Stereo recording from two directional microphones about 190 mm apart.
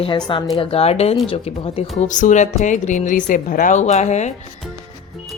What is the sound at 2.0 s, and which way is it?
A woman's voice, 40° left (ahead or behind).